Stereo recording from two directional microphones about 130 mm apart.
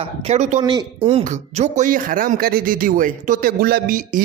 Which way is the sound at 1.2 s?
70° right (ahead or behind).